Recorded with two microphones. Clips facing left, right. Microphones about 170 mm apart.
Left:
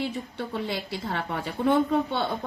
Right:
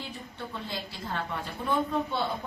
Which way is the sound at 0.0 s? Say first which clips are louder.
Left 9 dB; 75° left (ahead or behind).